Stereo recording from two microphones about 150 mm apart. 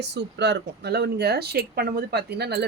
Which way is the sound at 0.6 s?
90° right.